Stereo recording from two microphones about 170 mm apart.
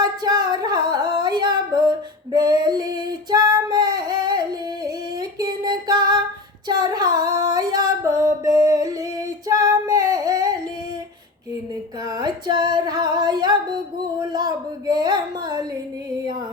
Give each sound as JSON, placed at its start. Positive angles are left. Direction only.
{"t": 0.2, "sound": "a sound", "side_deg": -25}
{"t": 0.9, "sound": "singing", "side_deg": -25}
{"t": 5.4, "sound": "music", "side_deg": -25}
{"t": 6.7, "sound": "female singing", "side_deg": -25}
{"t": 12.0, "sound": "female singing", "side_deg": -25}
{"t": 14.2, "sound": "a sound", "side_deg": -25}